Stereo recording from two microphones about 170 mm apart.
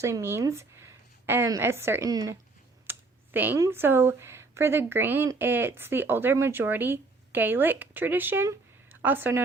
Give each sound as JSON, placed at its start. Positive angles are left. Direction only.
{"t": 0.0, "sound": "speech", "side_deg": -15}
{"t": 2.9, "sound": "computer keyboard", "side_deg": -15}
{"t": 3.3, "sound": "speech", "side_deg": -10}